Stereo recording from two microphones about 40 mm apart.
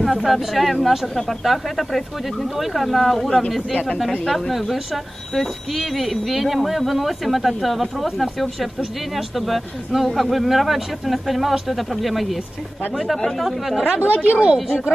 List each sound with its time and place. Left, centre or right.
0.0 s speech: centre
14.0 s a woman's voice: right